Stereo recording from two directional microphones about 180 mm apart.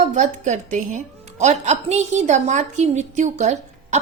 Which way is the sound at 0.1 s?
40° right (ahead or behind).